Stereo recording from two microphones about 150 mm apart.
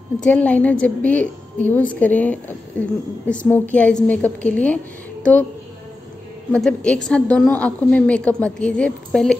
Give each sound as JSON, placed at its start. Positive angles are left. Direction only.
{"t": 0.2, "sound": "a woman's voice", "side_deg": 10}
{"t": 6.5, "sound": "a woman's voice", "side_deg": 5}